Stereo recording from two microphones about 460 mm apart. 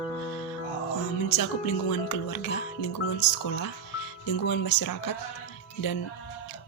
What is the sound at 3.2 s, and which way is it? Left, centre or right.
Speech, left.